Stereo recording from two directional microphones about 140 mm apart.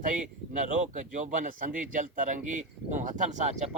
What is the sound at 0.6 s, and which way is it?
A man's voice, 65° right (ahead or behind).